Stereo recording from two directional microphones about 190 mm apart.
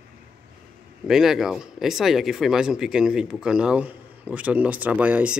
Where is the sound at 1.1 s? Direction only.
Centre (ahead or behind).